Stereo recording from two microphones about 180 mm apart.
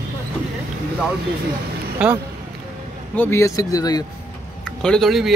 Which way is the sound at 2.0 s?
5° right (ahead or behind).